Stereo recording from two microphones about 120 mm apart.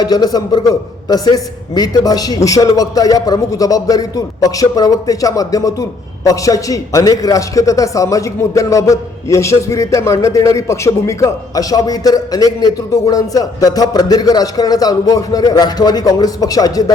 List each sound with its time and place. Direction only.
0.0 s a man's voice: 35° left (ahead or behind)